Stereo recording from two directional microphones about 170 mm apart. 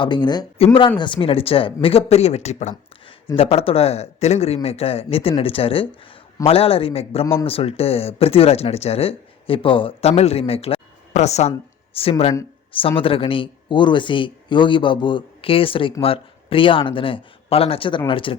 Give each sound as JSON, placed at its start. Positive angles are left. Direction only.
{"t": 0.0, "sound": "speech", "side_deg": 30}